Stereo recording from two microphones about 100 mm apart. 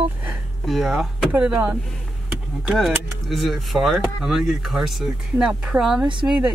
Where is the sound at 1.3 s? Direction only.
10° right (ahead or behind).